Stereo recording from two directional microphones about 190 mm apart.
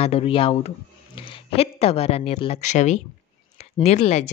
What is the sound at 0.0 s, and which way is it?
A woman's voice, 30° left (ahead or behind).